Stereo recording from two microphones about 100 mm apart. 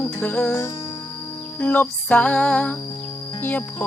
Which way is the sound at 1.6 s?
15° left (ahead or behind).